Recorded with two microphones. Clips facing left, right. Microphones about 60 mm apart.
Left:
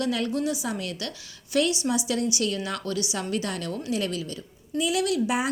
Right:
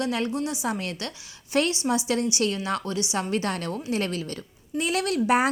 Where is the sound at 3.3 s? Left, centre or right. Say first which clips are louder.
Right 2 dB; right.